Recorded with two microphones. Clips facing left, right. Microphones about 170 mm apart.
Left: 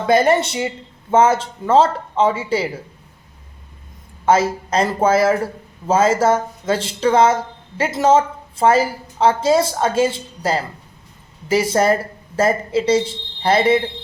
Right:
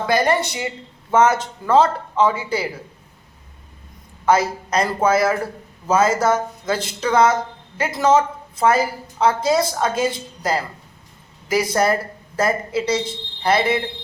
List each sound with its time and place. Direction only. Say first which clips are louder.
0.1 s a woman's voice: left 5 dB; 25° left (ahead or behind)
4.3 s a woman's voice: left 2 dB; 25° left (ahead or behind)